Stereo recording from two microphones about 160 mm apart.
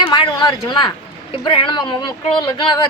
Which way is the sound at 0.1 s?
25° left (ahead or behind).